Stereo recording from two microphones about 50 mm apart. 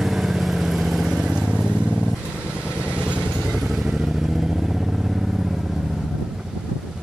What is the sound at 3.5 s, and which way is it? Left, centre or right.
Vehicle, centre.